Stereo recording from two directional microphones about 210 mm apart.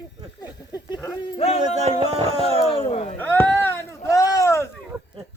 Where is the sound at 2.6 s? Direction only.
25° left (ahead or behind).